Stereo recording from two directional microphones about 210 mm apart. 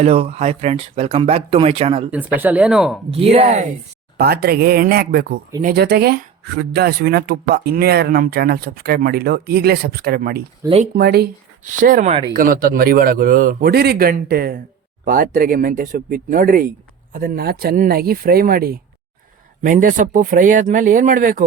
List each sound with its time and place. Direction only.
0.0 s speech: 30° right (ahead or behind)
2.0 s speech: 10° right (ahead or behind)
3.1 s speech: 30° right (ahead or behind)
4.2 s speech: 50° right (ahead or behind)